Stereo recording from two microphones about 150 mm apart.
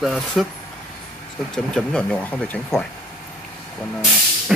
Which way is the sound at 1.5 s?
5° left (ahead or behind).